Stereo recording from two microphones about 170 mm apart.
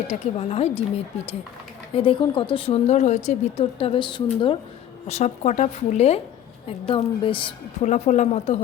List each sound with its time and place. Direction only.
0.1 s speech: 40° left (ahead or behind)
6.7 s speech: 30° left (ahead or behind)
7.9 s speech: 45° left (ahead or behind)